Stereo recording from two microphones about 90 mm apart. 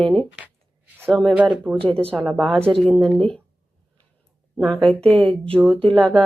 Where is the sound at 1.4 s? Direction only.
15° right (ahead or behind).